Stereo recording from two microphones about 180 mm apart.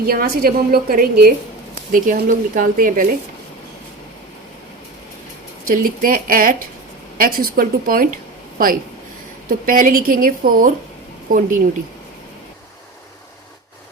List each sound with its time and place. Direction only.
0.0 s a woman's voice: 55° right (ahead or behind)
5.6 s speech: 50° right (ahead or behind)
9.5 s speech: 50° right (ahead or behind)